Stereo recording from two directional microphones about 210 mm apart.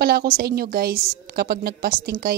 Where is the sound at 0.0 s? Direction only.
45° right (ahead or behind).